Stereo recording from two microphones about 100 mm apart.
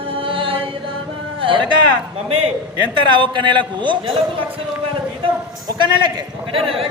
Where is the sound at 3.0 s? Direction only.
50° right (ahead or behind).